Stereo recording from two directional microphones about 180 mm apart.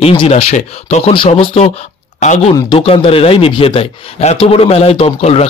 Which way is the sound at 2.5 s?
25° left (ahead or behind).